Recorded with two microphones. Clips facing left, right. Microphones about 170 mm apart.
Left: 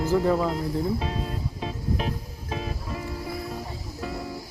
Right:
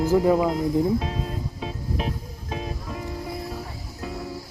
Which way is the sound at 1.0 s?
Centre (ahead or behind).